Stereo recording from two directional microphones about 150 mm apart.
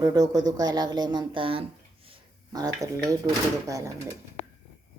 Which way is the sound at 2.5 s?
25° right (ahead or behind).